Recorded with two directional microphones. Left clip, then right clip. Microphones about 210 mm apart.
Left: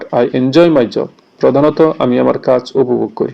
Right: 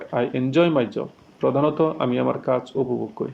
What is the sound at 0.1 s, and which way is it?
Speech, 25° left (ahead or behind).